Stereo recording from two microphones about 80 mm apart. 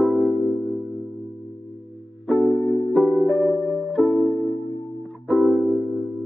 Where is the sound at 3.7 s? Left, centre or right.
Centre.